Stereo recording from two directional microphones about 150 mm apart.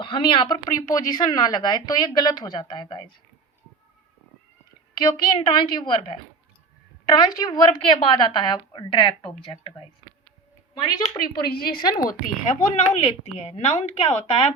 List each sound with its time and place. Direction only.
0.0 s a woman's voice: 35° left (ahead or behind)
4.9 s a woman's voice: 30° left (ahead or behind)
10.8 s a woman's voice: 30° left (ahead or behind)
11.4 s a woman's voice: 90° left; by 12.0 s 75° left (ahead or behind)
12.5 s speech: 45° left (ahead or behind)